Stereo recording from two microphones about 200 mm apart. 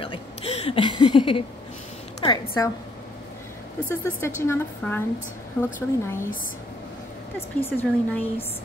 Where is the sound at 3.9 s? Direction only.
10° left (ahead or behind).